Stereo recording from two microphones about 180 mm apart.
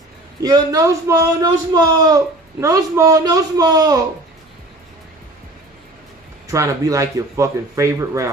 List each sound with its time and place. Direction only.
0.4 s a man's voice: 20° right (ahead or behind)
6.5 s speech: 15° right (ahead or behind)